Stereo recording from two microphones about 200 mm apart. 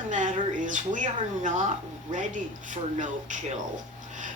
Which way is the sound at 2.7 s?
40° right (ahead or behind).